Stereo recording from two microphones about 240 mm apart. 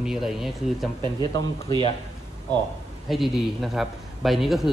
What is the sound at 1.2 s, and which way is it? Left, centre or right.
Speech, centre.